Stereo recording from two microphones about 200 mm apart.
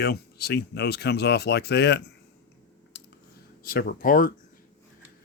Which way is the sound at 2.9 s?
60° left (ahead or behind).